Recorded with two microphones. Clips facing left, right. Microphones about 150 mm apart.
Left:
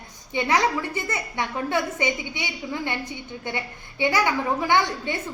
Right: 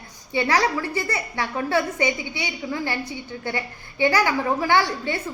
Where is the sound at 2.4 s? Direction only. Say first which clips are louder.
Right 2 dB; 20° left (ahead or behind).